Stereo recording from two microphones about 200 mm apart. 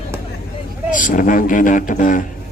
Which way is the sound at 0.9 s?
40° left (ahead or behind).